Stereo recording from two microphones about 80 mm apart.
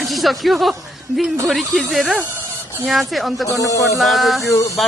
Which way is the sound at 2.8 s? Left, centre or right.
Centre.